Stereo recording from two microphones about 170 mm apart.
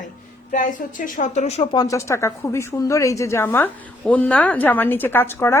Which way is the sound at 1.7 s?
20° left (ahead or behind).